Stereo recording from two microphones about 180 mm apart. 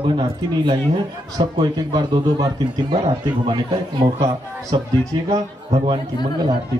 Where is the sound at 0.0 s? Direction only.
30° right (ahead or behind).